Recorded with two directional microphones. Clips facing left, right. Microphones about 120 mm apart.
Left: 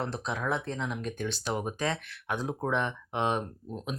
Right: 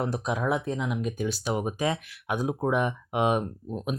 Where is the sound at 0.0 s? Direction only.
15° right (ahead or behind).